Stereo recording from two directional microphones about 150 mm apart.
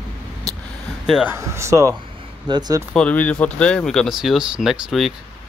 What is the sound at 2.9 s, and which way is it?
Speech, 10° left (ahead or behind).